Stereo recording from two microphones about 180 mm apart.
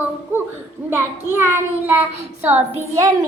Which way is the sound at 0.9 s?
10° right (ahead or behind).